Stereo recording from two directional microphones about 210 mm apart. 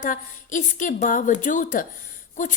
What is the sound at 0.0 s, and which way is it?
Speech, 40° left (ahead or behind).